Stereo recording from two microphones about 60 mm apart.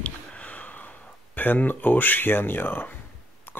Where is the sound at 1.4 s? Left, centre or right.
Left.